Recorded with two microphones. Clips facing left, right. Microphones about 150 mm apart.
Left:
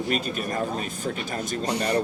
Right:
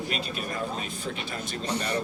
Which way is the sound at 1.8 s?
35° left (ahead or behind).